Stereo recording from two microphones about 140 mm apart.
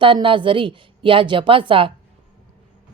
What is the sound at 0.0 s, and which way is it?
A woman's voice, 40° right (ahead or behind).